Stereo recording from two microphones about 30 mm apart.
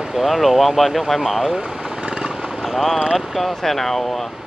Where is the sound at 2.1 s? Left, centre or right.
Centre.